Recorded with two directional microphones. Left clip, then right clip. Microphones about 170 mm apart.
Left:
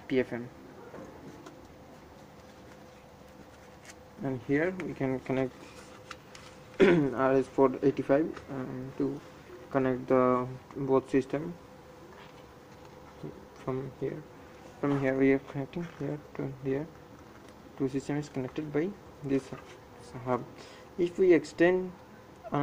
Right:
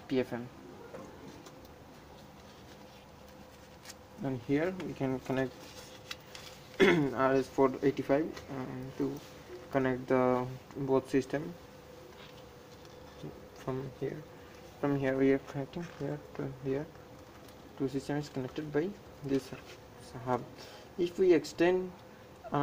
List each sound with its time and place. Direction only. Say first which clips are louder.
0.1 s speech: left 3 dB; 10° right (ahead or behind)
4.2 s speech: left 3 dB; 15° right (ahead or behind)
6.8 s speech: left 2 dB; 5° right (ahead or behind)
9.7 s speech: left 3 dB; 5° right (ahead or behind)
13.7 s speech: left 3 dB; centre (ahead or behind)